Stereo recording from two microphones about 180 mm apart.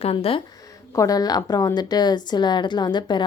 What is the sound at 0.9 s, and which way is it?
A woman's voice, 20° left (ahead or behind).